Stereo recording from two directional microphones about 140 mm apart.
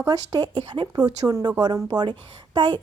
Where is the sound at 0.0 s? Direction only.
30° right (ahead or behind).